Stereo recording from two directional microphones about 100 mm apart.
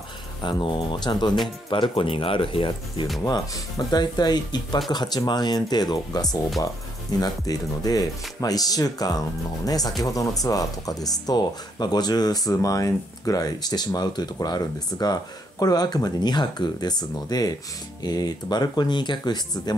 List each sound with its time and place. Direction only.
0.4 s speech: 50° left (ahead or behind)
1.7 s speech: 60° left (ahead or behind)
3.3 s speech: 45° left (ahead or behind)